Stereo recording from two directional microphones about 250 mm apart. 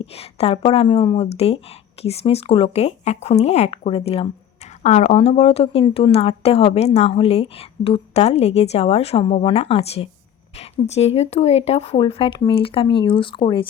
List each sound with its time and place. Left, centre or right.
0.0 s speech: left